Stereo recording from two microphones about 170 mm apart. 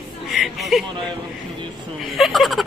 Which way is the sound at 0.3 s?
Centre (ahead or behind).